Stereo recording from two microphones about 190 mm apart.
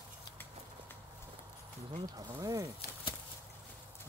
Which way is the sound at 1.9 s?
20° right (ahead or behind).